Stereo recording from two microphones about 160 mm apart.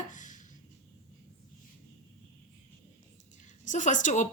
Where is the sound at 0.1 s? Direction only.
50° left (ahead or behind).